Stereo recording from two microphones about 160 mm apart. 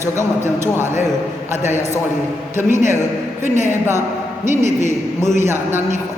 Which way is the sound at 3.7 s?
15° right (ahead or behind).